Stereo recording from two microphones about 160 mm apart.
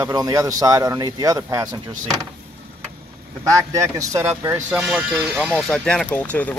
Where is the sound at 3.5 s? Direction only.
20° right (ahead or behind).